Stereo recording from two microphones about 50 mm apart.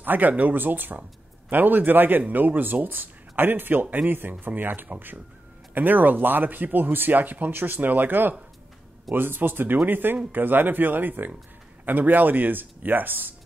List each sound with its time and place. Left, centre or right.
0.0 s speech: right